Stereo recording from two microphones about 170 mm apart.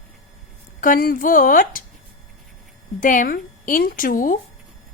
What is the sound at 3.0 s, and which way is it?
A woman's voice, 50° left (ahead or behind).